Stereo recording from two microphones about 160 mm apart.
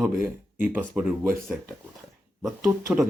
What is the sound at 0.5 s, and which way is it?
Speech, 10° right (ahead or behind).